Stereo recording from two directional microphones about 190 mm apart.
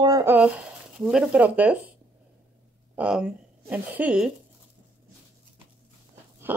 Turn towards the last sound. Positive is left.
turn(degrees=-10)  # may be behind; listen again after turning